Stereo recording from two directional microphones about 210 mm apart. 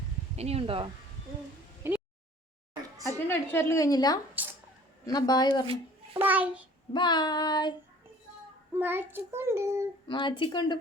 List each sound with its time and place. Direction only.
0.3 s speech: 30° right (ahead or behind)
1.8 s a sound: 10° right (ahead or behind)
3.2 s a woman's voice: 10° left (ahead or behind)
5.0 s child singing: 20° left (ahead or behind)
6.1 s child singing: 10° right (ahead or behind)
6.9 s child singing: 20° left (ahead or behind)
8.7 s child singing: 10° right (ahead or behind)
10.1 s child singing: 20° left (ahead or behind)